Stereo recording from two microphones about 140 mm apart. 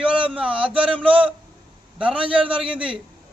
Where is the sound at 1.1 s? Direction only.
40° right (ahead or behind).